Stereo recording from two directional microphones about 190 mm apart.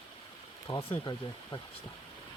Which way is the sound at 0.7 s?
15° left (ahead or behind).